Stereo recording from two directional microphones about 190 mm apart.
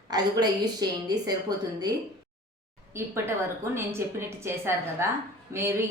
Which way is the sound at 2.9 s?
15° right (ahead or behind).